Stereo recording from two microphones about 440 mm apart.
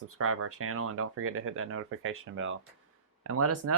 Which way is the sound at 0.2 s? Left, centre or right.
Right.